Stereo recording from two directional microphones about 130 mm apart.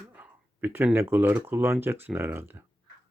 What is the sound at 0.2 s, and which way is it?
Speech, 15° right (ahead or behind).